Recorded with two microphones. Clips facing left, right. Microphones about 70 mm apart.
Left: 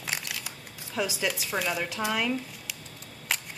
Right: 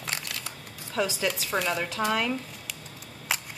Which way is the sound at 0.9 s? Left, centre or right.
Centre.